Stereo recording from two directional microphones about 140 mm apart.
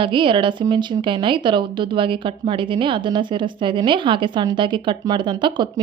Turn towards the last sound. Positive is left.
turn(degrees=-35)  # may be behind; listen again after turning